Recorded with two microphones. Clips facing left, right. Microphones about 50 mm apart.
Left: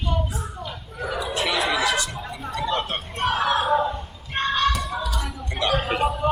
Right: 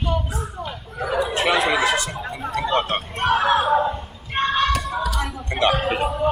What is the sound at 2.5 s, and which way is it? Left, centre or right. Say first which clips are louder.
Vehicle: right 4 dB; right.